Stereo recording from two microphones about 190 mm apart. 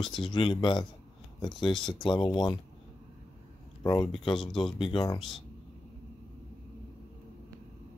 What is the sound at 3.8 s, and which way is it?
Speech, 20° left (ahead or behind).